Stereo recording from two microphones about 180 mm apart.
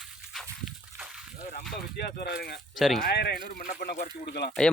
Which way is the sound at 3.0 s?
65° left (ahead or behind).